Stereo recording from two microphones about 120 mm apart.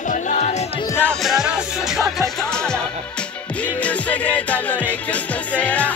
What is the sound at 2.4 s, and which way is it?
Music, 5° left (ahead or behind).